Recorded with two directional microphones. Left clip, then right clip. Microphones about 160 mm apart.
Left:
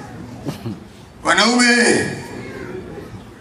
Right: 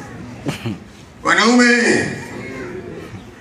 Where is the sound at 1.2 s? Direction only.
35° left (ahead or behind).